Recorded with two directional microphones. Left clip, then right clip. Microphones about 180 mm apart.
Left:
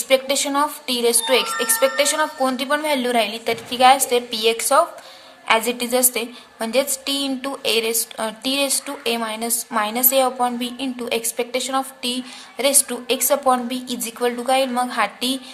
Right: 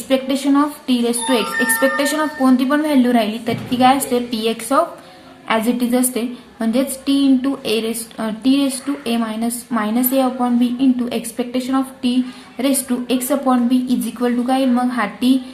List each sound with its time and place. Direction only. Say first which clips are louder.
0.1 s a woman's voice: right 1 dB; 35° left (ahead or behind)